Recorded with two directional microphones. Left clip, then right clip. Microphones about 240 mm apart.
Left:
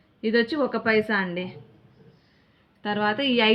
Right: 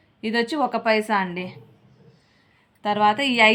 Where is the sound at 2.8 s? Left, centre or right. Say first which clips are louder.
Right 5 dB; right.